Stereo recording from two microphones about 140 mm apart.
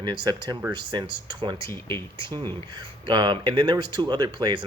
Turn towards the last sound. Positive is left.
turn(degrees=-30)  # may be behind; listen again after turning